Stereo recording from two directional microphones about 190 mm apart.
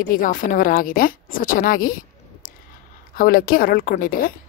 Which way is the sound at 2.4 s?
45° left (ahead or behind).